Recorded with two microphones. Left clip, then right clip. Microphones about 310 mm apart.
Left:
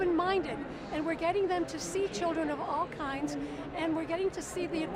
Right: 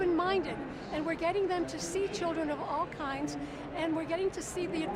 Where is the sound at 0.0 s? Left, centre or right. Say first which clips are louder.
Even; centre.